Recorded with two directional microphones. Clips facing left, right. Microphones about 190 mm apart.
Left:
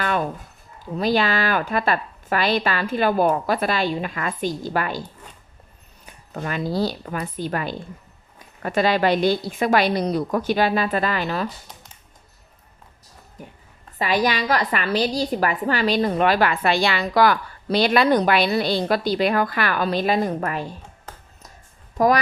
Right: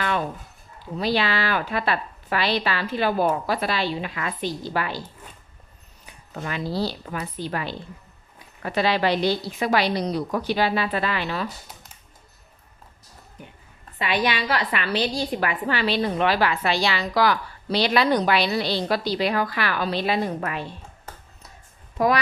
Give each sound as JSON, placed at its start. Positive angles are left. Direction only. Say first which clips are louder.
{"t": 0.0, "sound": "a sound", "louder": "left 2 dB", "side_deg": 45}
{"t": 0.9, "sound": "a woman's voice", "louder": "left 3 dB", "side_deg": 45}
{"t": 6.3, "sound": "a woman's voice", "louder": "left 3 dB", "side_deg": 50}
{"t": 14.0, "sound": "a woman's voice", "louder": "left 3 dB", "side_deg": 40}
{"t": 21.9, "sound": "speech", "louder": "left 3 dB", "side_deg": 45}